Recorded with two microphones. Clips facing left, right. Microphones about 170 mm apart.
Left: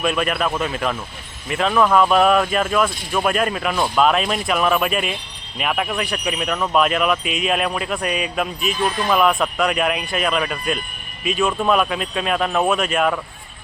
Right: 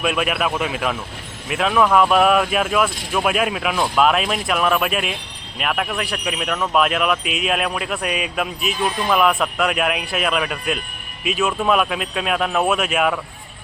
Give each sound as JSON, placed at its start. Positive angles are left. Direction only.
{"t": 0.0, "sound": "speech", "side_deg": -5}